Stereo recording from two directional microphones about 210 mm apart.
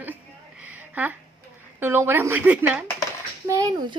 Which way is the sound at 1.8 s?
10° right (ahead or behind).